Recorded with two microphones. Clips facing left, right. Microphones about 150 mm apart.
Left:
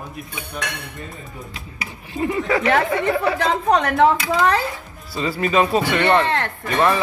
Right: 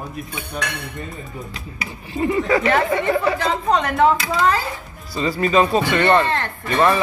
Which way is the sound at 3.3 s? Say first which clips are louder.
Left 1 dB; 65° left (ahead or behind).